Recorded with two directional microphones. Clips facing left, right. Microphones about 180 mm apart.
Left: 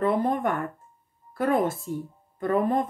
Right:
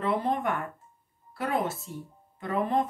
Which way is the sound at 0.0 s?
45° left (ahead or behind).